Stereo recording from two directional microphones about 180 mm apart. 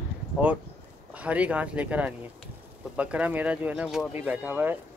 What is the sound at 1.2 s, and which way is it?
Speech, 5° right (ahead or behind).